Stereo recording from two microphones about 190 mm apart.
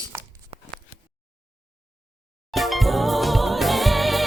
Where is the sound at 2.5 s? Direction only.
Centre (ahead or behind).